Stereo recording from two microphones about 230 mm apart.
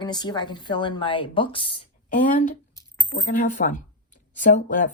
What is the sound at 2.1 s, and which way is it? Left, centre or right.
Speech, left.